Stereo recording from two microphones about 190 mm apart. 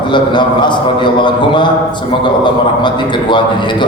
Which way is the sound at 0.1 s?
25° left (ahead or behind).